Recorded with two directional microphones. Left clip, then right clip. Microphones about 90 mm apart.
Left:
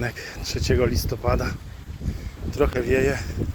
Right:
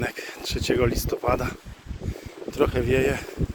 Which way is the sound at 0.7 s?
40° right (ahead or behind).